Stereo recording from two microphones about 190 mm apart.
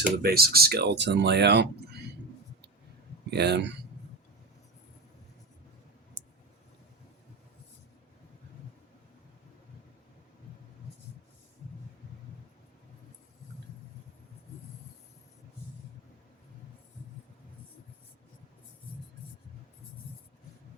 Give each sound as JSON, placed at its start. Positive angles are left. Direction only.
{"t": 0.2, "sound": "speech", "side_deg": -55}
{"t": 3.2, "sound": "speech", "side_deg": -60}